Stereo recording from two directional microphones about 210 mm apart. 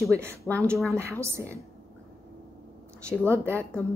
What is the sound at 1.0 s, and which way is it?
Speech, 10° right (ahead or behind).